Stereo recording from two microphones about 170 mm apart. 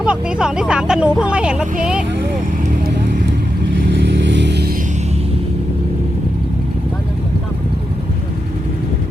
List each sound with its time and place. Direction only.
0.0 s speech: 5° right (ahead or behind)
3.8 s vehicle: 85° right